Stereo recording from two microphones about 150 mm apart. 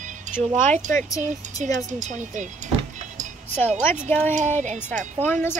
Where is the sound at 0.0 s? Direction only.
55° right (ahead or behind).